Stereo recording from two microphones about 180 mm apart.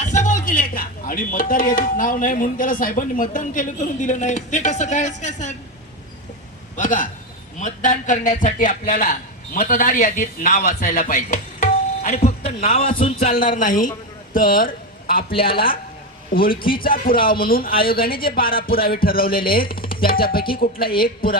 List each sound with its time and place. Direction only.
0.0 s speech: 40° left (ahead or behind)
6.7 s a man's voice: 45° left (ahead or behind)
12.9 s a man's voice: 30° left (ahead or behind)
13.3 s speech: 50° left (ahead or behind)
16.3 s speech: 55° left (ahead or behind)